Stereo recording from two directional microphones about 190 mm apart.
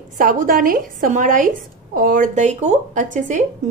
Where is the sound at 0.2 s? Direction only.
45° right (ahead or behind).